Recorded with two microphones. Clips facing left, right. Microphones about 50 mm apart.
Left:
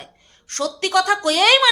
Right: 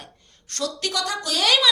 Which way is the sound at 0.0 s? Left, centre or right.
Left.